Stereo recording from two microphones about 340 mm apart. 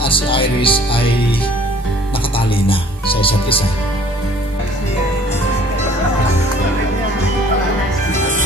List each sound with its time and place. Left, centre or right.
0.0 s music: centre
2.6 s music: centre